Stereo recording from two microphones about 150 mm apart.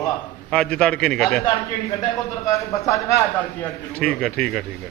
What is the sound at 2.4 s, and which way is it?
Speech, 20° left (ahead or behind).